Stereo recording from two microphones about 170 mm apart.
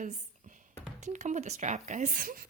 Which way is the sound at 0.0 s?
50° right (ahead or behind).